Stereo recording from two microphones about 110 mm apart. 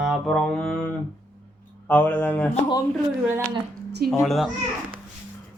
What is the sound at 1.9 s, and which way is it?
Speech, 15° left (ahead or behind).